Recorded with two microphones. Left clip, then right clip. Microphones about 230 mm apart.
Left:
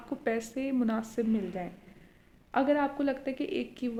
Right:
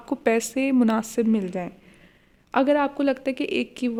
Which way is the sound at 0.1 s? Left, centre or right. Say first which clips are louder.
Right 10 dB; right.